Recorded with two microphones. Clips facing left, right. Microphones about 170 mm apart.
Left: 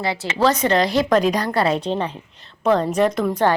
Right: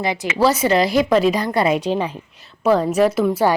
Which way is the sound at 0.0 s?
20° right (ahead or behind).